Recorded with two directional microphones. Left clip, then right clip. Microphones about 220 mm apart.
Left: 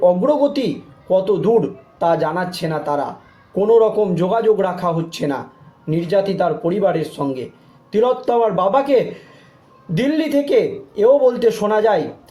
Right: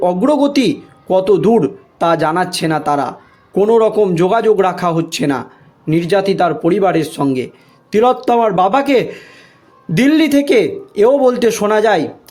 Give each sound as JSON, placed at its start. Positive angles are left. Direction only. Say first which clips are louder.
{"t": 0.0, "sound": "speech", "louder": "right 1 dB", "side_deg": -50}